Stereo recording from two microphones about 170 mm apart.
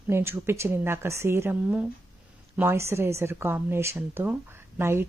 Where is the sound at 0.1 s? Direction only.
15° right (ahead or behind).